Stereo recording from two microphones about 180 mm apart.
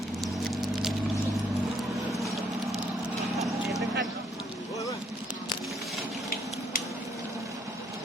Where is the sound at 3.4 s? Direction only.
Centre (ahead or behind).